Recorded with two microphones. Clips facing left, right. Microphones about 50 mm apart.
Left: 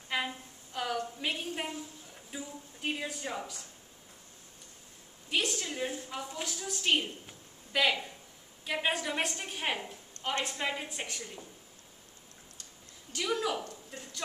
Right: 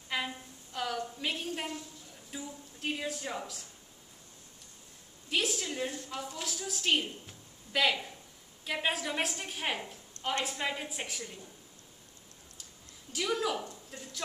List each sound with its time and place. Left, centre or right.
0.1 s a sound: centre
2.3 s a woman's voice: centre
5.3 s a woman's voice: centre
6.4 s a woman's voice: centre
13.1 s a woman's voice: centre